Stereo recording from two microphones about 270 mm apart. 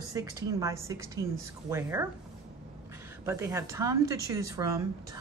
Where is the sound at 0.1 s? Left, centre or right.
Centre.